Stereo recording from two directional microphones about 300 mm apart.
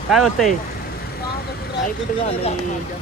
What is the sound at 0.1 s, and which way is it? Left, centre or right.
Speech, centre.